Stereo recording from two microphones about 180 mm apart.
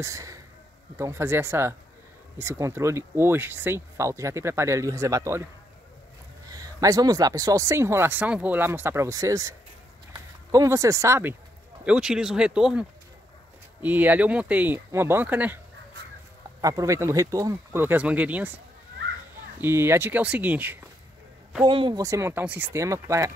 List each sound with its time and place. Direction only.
0.0 s speech: 15° right (ahead or behind)
6.4 s speech: 20° right (ahead or behind); by 12.8 s 5° right (ahead or behind)
13.8 s speech: 10° right (ahead or behind)
16.6 s speech: 20° right (ahead or behind)
19.6 s speech: 15° right (ahead or behind)
21.6 s speech: 30° right (ahead or behind)
22.0 s speech: 15° right (ahead or behind)